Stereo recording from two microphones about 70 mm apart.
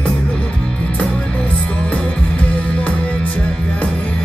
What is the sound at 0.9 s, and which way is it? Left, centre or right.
Music, centre.